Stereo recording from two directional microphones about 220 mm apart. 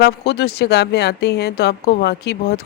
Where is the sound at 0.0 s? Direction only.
45° left (ahead or behind).